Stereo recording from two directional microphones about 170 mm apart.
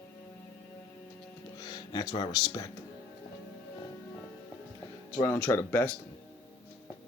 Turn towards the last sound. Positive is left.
turn(degrees=15)  # may be behind; listen again after turning